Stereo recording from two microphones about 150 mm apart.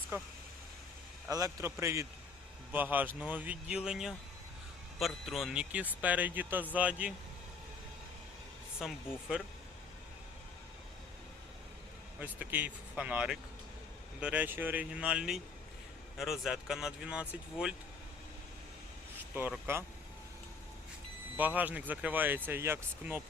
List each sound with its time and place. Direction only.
0.1 s speech: 15° right (ahead or behind)
1.3 s a man's voice: 20° right (ahead or behind)
8.8 s speech: 5° right (ahead or behind)
12.2 s speech: 10° right (ahead or behind)
19.3 s speech: 15° right (ahead or behind)
21.3 s speech: 10° right (ahead or behind)